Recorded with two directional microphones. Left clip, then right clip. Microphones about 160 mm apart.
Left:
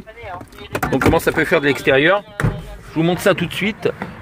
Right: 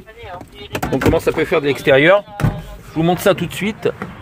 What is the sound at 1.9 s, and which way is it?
Speech, 20° right (ahead or behind).